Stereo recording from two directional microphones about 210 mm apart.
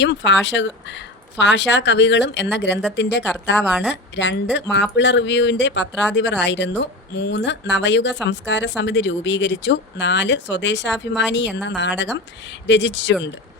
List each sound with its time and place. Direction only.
0.0 s speech: 55° left (ahead or behind)
3.6 s speech: 5° right (ahead or behind)
4.1 s speech: 60° left (ahead or behind)